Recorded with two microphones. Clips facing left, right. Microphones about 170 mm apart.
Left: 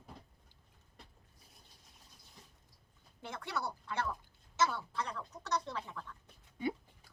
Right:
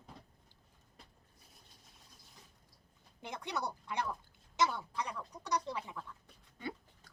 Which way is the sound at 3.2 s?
20° right (ahead or behind).